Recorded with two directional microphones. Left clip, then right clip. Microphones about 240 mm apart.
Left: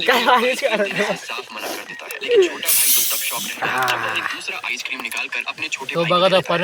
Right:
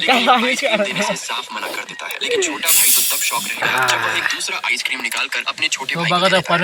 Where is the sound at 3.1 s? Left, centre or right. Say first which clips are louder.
Right 4 dB; right.